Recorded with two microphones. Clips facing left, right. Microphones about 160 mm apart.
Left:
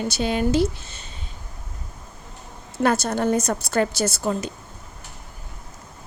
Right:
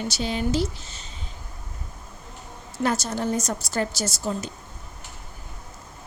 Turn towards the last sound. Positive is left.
turn(degrees=60)  # may be behind; listen again after turning